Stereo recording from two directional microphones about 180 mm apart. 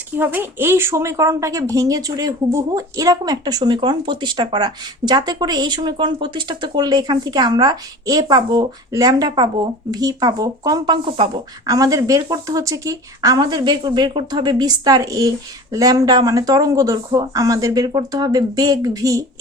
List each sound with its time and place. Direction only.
0.2 s speech: 10° right (ahead or behind)